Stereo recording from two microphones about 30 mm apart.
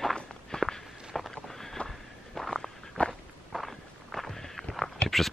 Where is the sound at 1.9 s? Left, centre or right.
Centre.